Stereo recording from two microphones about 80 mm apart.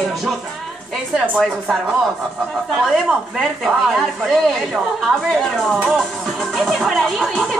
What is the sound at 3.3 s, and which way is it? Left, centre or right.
Music, centre.